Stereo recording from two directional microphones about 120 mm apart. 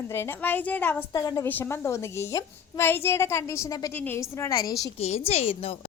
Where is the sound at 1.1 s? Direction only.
30° left (ahead or behind).